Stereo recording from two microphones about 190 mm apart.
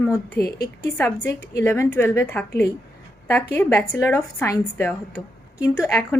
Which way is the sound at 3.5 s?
10° left (ahead or behind).